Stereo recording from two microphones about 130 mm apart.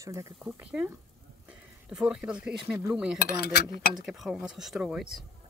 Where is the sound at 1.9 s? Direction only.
5° right (ahead or behind).